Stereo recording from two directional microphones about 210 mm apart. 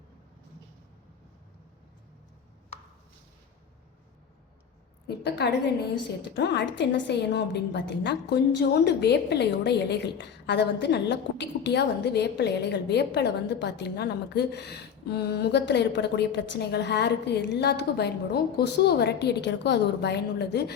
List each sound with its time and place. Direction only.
5.0 s a woman's voice: 50° left (ahead or behind)